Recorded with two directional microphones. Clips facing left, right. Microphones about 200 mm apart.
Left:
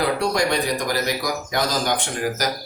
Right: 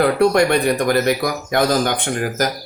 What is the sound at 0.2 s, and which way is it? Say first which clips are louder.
Speech: right 7 dB; 60° right (ahead or behind).